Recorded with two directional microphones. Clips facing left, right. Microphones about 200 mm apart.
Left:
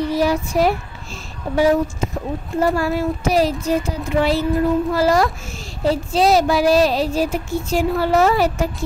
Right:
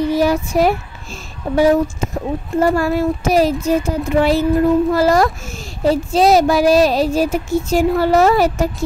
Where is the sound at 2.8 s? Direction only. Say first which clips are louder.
Right 3 dB; 50° right (ahead or behind).